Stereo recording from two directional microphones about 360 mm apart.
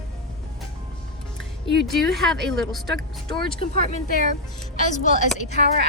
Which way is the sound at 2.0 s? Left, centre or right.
Centre.